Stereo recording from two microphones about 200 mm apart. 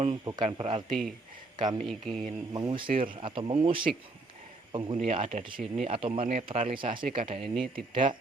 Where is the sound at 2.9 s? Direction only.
45° right (ahead or behind).